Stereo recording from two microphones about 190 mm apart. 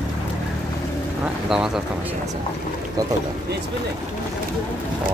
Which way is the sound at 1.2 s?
5° right (ahead or behind).